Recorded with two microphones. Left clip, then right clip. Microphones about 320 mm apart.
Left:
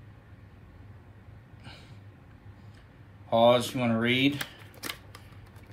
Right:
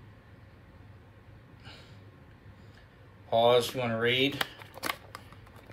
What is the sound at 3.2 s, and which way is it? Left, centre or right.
Speech, centre.